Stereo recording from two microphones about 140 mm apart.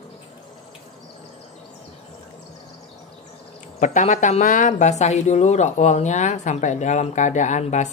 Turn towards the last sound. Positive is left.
turn(degrees=60)  # may be behind; listen again after turning